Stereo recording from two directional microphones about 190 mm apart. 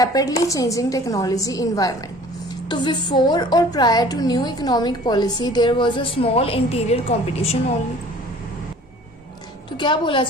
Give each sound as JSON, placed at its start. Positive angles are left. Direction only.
{"t": 0.0, "sound": "a woman's voice", "side_deg": 20}
{"t": 9.7, "sound": "a woman's voice", "side_deg": 25}